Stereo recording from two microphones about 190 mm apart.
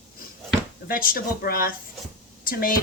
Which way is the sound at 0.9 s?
50° left (ahead or behind).